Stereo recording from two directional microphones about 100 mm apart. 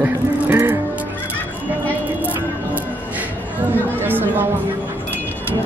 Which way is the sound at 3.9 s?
20° right (ahead or behind).